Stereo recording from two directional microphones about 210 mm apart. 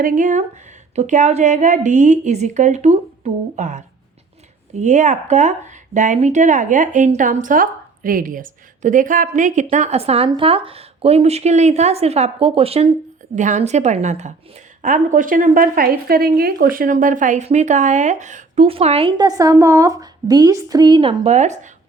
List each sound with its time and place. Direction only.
0.0 s a woman's voice: 40° right (ahead or behind)